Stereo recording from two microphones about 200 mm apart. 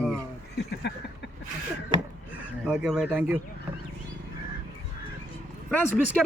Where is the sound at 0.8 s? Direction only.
55° left (ahead or behind).